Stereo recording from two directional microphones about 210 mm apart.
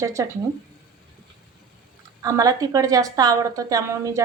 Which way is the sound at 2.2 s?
15° right (ahead or behind).